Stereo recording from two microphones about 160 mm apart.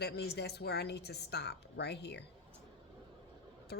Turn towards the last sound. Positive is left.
turn(degrees=80)